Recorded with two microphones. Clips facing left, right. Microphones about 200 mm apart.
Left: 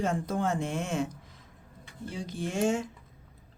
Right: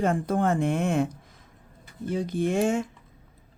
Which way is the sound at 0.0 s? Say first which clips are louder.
Right 5 dB; 55° right (ahead or behind).